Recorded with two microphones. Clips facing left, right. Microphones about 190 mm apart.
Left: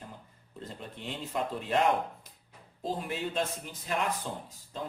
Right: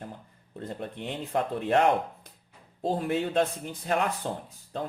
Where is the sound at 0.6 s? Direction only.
60° right (ahead or behind).